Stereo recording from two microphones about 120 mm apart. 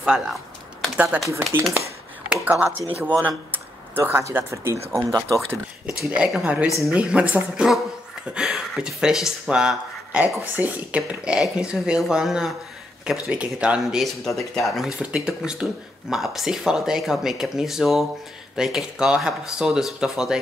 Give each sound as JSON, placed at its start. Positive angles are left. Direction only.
{"t": 0.0, "sound": "a woman's voice", "side_deg": -5}
{"t": 5.9, "sound": "a woman's voice", "side_deg": -5}
{"t": 11.0, "sound": "a woman's voice", "side_deg": -5}